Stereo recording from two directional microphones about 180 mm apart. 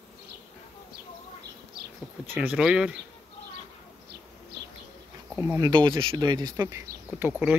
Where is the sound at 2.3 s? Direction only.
Centre (ahead or behind).